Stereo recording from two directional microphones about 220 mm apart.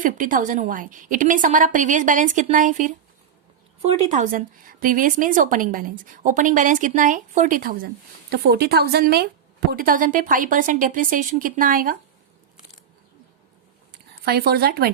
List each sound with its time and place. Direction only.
0.0 s a woman's voice: 35° right (ahead or behind)
14.3 s a woman's voice: 45° right (ahead or behind)